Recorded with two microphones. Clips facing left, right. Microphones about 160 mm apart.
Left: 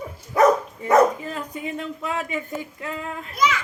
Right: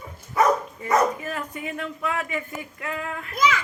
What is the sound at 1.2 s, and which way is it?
Speech, 20° left (ahead or behind).